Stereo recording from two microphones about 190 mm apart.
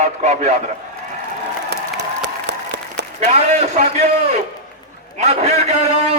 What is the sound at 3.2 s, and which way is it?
A man's voice, 35° right (ahead or behind).